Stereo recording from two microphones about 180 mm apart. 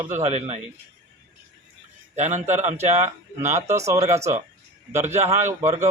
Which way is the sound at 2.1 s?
40° right (ahead or behind).